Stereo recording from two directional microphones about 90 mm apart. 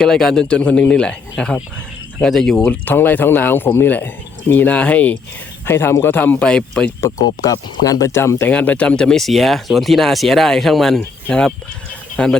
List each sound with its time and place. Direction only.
0.0 s speech: 5° left (ahead or behind)
2.6 s speech: 20° left (ahead or behind)
5.6 s speech: 25° left (ahead or behind); by 6.9 s 10° left (ahead or behind)
7.0 s speech: 45° left (ahead or behind)
8.4 s speech: 15° left (ahead or behind)